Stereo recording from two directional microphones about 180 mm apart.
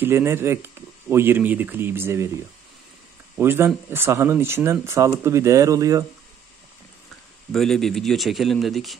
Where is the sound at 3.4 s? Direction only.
15° right (ahead or behind).